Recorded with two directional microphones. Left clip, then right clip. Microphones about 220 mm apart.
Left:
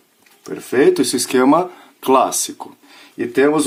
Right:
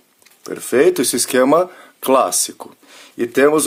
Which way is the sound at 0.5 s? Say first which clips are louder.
Even; 50° right (ahead or behind).